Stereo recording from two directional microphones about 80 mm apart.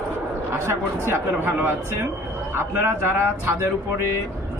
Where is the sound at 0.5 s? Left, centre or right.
Right.